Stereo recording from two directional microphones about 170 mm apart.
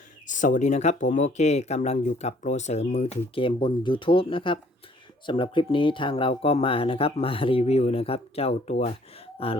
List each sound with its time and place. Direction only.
0.3 s speech: 50° left (ahead or behind)